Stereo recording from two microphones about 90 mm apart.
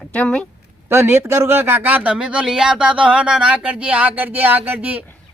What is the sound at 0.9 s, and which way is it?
A man's voice, 25° right (ahead or behind).